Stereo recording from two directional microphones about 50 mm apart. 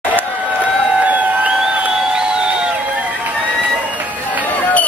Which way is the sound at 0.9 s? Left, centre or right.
Right.